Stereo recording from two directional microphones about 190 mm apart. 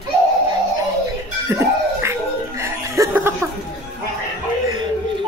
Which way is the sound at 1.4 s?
15° right (ahead or behind).